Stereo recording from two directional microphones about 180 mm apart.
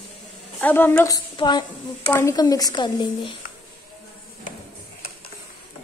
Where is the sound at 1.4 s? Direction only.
25° left (ahead or behind).